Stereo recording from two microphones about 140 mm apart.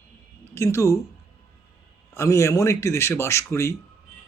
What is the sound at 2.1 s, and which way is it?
A man's voice, 20° left (ahead or behind).